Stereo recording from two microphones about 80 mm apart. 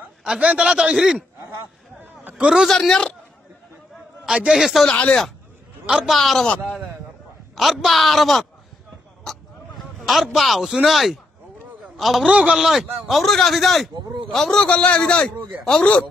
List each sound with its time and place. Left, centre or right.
0.2 s a man's voice: centre
2.0 s a sound: centre
2.6 s speech: centre
4.3 s a man's voice: centre
4.8 s a man's voice: centre
5.9 s a man's voice: centre
6.1 s speech: centre
7.5 s speech: centre
9.2 s a sound: centre
12.0 s speech: centre
12.3 s a man's voice: centre